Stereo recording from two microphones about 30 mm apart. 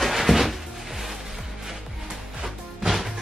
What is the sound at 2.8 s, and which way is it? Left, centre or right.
Music, centre.